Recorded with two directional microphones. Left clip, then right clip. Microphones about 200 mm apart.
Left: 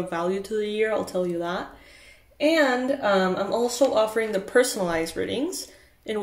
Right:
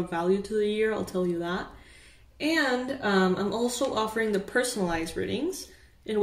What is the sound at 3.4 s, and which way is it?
Speech, 20° left (ahead or behind).